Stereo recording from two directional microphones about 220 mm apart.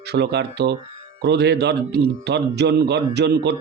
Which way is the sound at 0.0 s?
50° right (ahead or behind).